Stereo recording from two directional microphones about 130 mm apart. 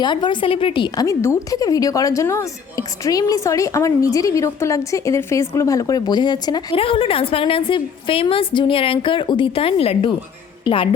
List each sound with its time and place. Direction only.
0.0 s a woman's voice: 35° left (ahead or behind)
1.0 s speech: 25° left (ahead or behind)
6.7 s a woman's voice: 45° left (ahead or behind)